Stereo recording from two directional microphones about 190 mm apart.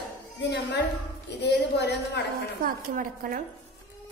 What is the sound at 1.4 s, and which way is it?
Speech, 60° left (ahead or behind).